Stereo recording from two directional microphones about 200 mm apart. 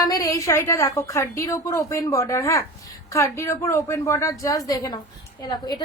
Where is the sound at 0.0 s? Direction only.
20° left (ahead or behind).